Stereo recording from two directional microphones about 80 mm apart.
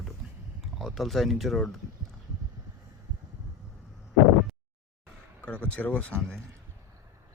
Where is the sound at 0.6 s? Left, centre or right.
Centre.